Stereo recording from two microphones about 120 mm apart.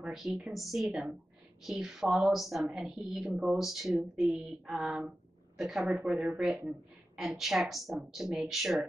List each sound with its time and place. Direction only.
0.0 s speech: centre (ahead or behind)